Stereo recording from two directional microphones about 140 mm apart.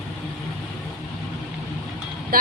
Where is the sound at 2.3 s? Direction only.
90° right.